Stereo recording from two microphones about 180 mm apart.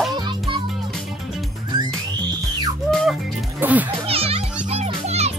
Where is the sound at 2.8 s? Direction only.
Centre (ahead or behind).